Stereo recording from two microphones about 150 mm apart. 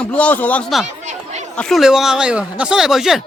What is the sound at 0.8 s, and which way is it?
Chatter, 50° right (ahead or behind).